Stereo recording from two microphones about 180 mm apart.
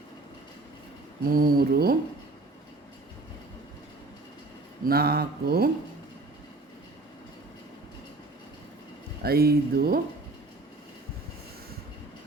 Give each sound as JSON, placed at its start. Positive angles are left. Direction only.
{"t": 1.3, "sound": "mantra", "side_deg": -55}
{"t": 4.9, "sound": "mantra", "side_deg": -60}
{"t": 9.2, "sound": "mantra", "side_deg": -60}